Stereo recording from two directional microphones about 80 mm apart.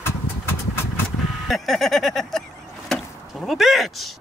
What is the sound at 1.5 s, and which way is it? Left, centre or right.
Speech, centre.